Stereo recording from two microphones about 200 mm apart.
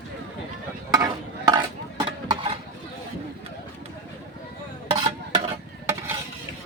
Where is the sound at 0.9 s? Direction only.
20° right (ahead or behind).